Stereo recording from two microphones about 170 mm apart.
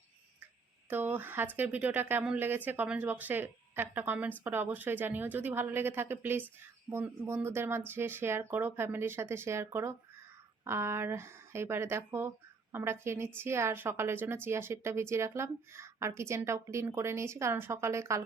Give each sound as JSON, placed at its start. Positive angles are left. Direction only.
{"t": 0.9, "sound": "a woman's voice", "side_deg": -10}